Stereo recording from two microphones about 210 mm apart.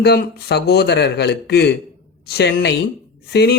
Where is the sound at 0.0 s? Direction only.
50° left (ahead or behind).